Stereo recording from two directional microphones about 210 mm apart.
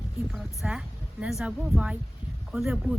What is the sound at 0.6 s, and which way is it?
Speech, 5° right (ahead or behind).